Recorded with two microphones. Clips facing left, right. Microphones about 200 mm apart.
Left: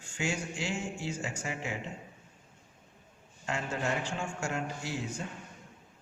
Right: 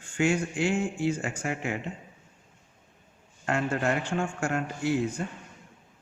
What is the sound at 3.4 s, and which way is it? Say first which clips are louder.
Speech: right 6 dB; 60° right (ahead or behind).